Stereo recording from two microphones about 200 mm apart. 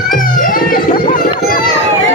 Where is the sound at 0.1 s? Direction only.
45° left (ahead or behind).